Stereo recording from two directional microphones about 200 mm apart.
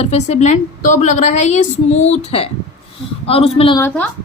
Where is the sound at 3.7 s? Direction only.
10° left (ahead or behind).